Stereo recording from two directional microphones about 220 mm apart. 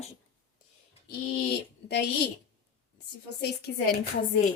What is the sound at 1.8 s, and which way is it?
A woman's voice, 45° left (ahead or behind).